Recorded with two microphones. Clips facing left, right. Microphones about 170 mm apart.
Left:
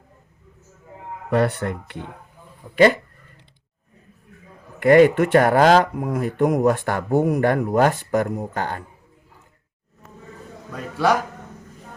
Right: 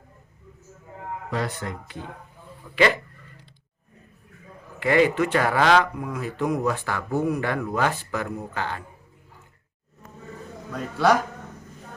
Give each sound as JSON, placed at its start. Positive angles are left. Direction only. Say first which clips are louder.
{"t": 1.3, "sound": "speech", "louder": "left 10 dB", "side_deg": 60}
{"t": 2.7, "sound": "speech", "louder": "left 6 dB", "side_deg": 45}
{"t": 4.8, "sound": "speech", "louder": "left 7 dB", "side_deg": 50}